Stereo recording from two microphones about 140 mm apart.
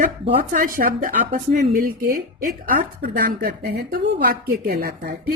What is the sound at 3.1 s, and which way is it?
A woman's voice, 85° right.